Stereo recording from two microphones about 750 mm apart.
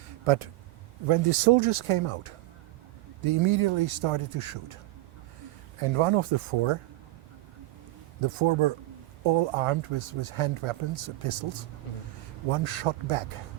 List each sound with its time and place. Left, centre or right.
1.0 s speech: right
5.8 s speech: right
8.3 s speech: right